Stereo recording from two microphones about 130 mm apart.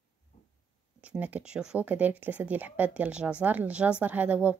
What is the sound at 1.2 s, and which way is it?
Speech, 10° right (ahead or behind).